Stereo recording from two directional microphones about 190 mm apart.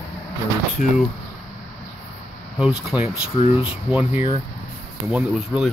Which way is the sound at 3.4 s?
30° left (ahead or behind).